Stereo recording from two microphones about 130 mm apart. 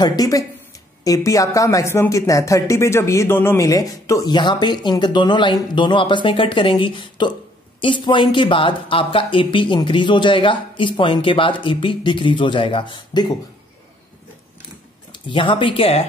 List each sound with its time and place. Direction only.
0.0 s speech: 30° left (ahead or behind)
15.1 s speech: 40° left (ahead or behind)